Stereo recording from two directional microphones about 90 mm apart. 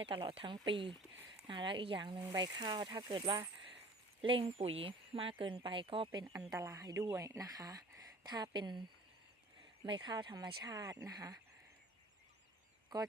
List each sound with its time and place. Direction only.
0.0 s speech: 90° right; by 2.2 s 65° right (ahead or behind)
2.3 s speech: 55° right (ahead or behind)
4.2 s speech: 85° right
6.5 s speech: 35° right (ahead or behind); by 8.8 s 55° right (ahead or behind)
9.8 s speech: 60° right (ahead or behind); by 11.3 s 45° right (ahead or behind)